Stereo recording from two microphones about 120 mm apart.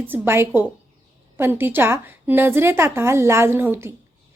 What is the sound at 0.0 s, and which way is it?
A woman's voice, 20° right (ahead or behind).